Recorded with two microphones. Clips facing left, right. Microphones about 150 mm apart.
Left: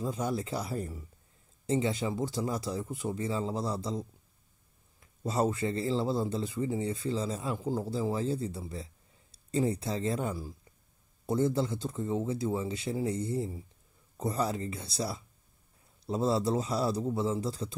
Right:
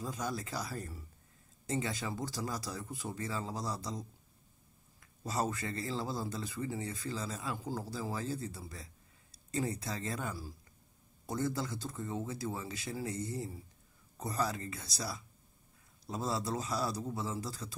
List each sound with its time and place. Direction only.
0.0 s a man's voice: 25° left (ahead or behind)
5.0 s a man's voice: 25° left (ahead or behind)